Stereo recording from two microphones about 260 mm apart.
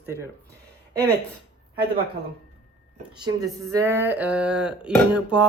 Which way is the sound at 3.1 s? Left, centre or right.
Centre.